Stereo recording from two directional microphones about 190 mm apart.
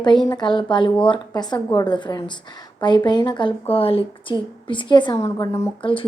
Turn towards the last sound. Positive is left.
turn(degrees=20)  # may be behind; listen again after turning